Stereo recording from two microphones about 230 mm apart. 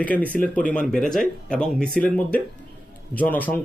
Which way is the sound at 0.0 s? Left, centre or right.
Centre.